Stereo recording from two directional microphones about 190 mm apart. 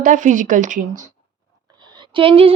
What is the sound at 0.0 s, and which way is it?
Speech, 45° right (ahead or behind).